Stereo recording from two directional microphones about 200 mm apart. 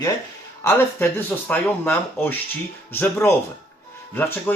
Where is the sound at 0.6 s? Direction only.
10° left (ahead or behind).